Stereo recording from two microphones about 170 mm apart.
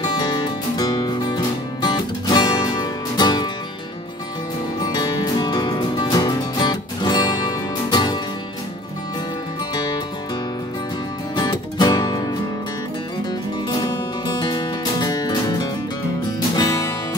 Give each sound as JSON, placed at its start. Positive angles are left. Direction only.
{"t": 0.0, "sound": "music", "side_deg": 25}
{"t": 4.9, "sound": "music", "side_deg": 25}
{"t": 11.3, "sound": "music", "side_deg": 25}
{"t": 13.7, "sound": "music", "side_deg": 25}